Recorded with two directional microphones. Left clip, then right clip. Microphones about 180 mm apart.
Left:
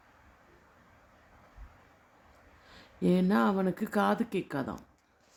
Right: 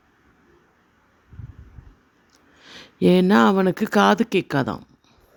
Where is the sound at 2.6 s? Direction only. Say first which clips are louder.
Right 12 dB; 55° right (ahead or behind).